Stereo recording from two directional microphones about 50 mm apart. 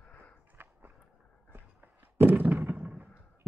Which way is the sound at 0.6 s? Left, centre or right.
Right.